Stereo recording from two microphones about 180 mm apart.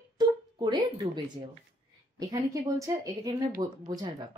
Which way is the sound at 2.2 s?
20° right (ahead or behind).